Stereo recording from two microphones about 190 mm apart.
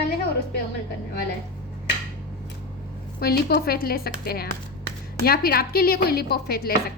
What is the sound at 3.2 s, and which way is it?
A woman's voice, 55° left (ahead or behind).